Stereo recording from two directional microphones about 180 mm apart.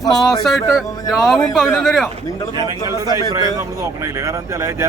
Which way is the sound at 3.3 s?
20° right (ahead or behind).